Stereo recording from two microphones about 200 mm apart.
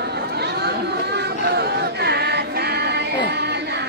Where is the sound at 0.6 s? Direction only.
55° right (ahead or behind).